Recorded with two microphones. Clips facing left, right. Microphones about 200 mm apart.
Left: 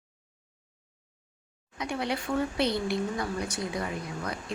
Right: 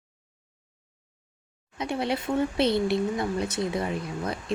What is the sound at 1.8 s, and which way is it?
Speech, 25° right (ahead or behind).